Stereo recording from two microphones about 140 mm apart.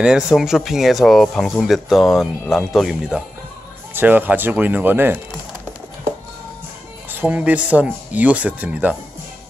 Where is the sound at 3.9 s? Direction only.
15° right (ahead or behind).